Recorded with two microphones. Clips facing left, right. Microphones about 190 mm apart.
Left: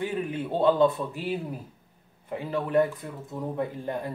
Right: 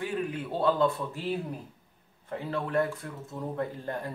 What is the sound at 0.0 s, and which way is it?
A man's voice, 20° left (ahead or behind).